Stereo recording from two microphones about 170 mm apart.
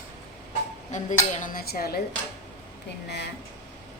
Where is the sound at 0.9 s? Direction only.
50° left (ahead or behind); by 2.0 s 65° left (ahead or behind).